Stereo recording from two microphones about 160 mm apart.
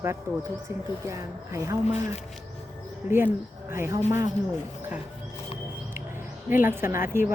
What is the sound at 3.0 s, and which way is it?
Speech, 45° left (ahead or behind).